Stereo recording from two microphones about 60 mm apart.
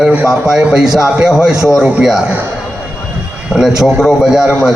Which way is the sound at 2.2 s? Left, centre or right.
Right.